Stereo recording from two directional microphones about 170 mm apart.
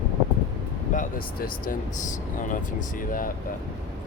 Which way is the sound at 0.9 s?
55° left (ahead or behind).